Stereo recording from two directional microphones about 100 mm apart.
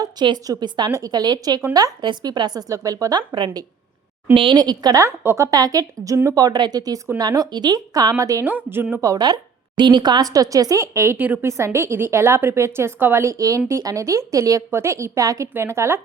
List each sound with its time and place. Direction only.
0.0 s a woman's voice: 45° right (ahead or behind)
5.0 s a woman's voice: 25° right (ahead or behind)
5.5 s a woman's voice: 40° right (ahead or behind)
8.4 s a woman's voice: 20° right (ahead or behind)
9.0 s a woman's voice: 40° right (ahead or behind)